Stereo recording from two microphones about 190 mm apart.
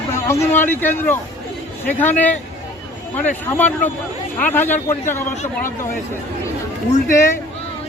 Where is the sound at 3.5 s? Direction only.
10° left (ahead or behind).